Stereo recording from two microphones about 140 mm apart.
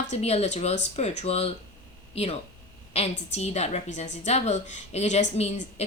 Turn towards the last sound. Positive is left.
turn(degrees=50)  # may be behind; listen again after turning